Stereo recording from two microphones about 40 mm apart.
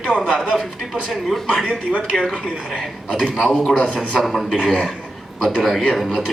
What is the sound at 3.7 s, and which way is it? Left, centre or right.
Speech, left.